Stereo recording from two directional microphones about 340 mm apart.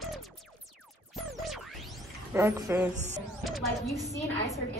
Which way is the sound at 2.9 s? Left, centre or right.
Right.